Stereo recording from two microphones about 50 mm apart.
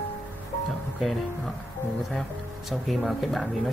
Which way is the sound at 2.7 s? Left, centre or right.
Centre.